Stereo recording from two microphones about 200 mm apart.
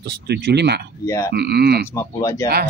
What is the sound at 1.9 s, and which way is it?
Speech, 15° left (ahead or behind).